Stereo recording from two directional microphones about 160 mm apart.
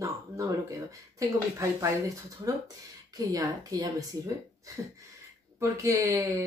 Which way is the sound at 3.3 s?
20° right (ahead or behind).